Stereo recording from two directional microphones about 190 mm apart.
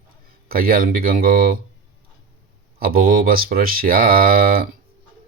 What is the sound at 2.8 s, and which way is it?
Speech, 50° right (ahead or behind).